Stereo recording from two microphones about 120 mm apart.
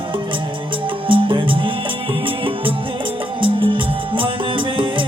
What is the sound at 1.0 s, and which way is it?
Music, 45° right (ahead or behind).